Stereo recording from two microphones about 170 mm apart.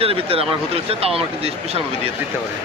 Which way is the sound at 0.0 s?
35° right (ahead or behind).